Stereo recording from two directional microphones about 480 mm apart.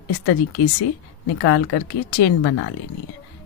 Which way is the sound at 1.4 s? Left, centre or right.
Left.